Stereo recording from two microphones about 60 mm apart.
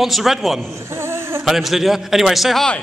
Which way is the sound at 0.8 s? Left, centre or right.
Right.